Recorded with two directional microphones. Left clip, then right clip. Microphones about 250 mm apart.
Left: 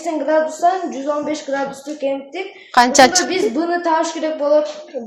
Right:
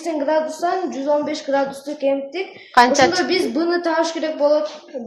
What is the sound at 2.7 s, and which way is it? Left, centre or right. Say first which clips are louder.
Speech: left 2 dB; left.